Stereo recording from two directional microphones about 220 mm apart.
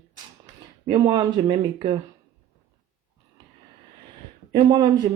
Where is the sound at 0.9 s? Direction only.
20° right (ahead or behind).